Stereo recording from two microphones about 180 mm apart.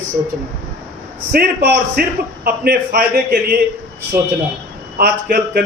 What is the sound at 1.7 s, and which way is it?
A man's voice, 55° right (ahead or behind).